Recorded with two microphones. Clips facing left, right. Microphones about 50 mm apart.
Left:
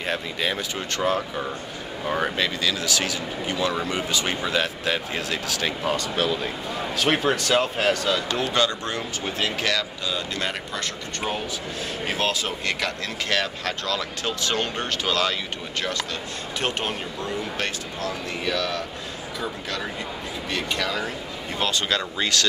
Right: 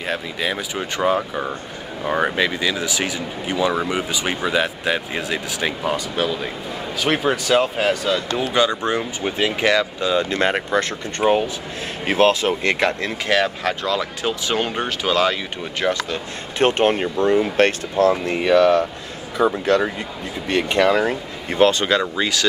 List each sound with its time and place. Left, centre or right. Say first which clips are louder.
0.0 s speech: right 2 dB; centre
0.7 s speech: right 6 dB; centre
8.4 s speech: right 4 dB; centre
13.3 s speech: right 7 dB; centre
16.5 s speech: right 11 dB; right
18.1 s speech: right 10 dB; right
21.8 s speech: right 6 dB; centre